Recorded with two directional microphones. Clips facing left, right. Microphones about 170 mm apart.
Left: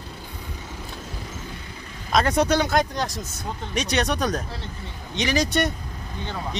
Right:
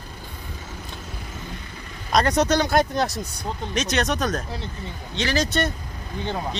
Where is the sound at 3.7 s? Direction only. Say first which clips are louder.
Even; 10° left (ahead or behind).